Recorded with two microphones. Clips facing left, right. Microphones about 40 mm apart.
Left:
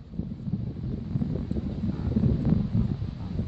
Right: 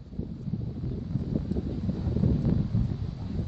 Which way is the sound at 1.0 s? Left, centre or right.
Left.